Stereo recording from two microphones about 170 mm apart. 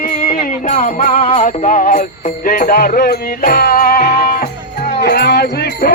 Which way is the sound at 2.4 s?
55° left (ahead or behind).